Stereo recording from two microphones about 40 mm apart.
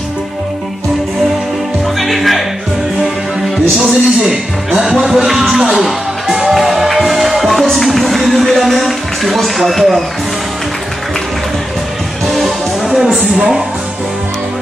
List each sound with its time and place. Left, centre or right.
2.0 s music: centre
3.8 s a man's voice: centre
5.6 s music: centre
12.3 s music: centre